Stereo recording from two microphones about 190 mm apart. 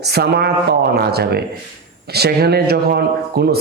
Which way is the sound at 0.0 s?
55° right (ahead or behind).